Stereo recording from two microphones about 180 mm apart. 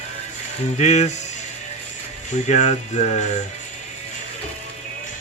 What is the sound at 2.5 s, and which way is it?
Speech, 40° left (ahead or behind).